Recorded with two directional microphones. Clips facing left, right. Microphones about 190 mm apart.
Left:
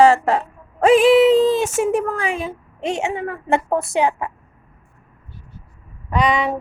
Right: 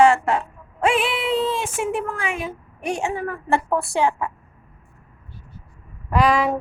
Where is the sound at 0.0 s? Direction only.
35° left (ahead or behind); by 4.3 s 20° left (ahead or behind).